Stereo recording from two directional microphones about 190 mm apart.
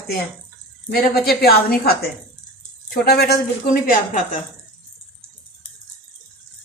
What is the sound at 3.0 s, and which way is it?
Speech, 55° left (ahead or behind).